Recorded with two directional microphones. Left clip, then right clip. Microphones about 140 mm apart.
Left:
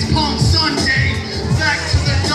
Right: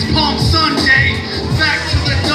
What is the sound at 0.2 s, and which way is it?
Music, 20° right (ahead or behind).